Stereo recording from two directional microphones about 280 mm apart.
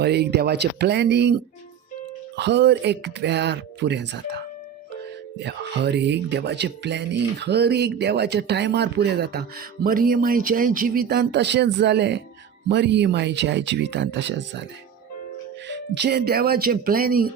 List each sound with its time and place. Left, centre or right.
0.0 s speech: right
5.4 s speech: right
15.7 s speech: right